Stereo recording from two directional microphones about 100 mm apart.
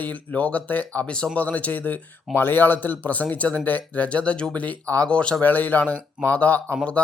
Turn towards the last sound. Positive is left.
turn(degrees=10)  # may be behind; listen again after turning